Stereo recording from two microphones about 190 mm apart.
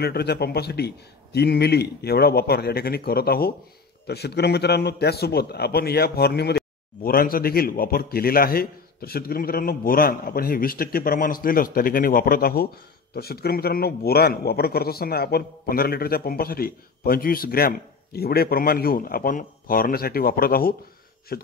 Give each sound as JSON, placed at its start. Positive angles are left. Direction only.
{"t": 0.0, "sound": "a man's voice", "side_deg": 55}